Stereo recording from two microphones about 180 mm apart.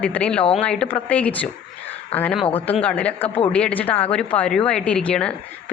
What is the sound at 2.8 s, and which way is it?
Speech, 10° left (ahead or behind).